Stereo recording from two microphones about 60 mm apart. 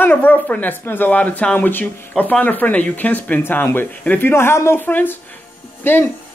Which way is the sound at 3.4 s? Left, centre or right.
Left.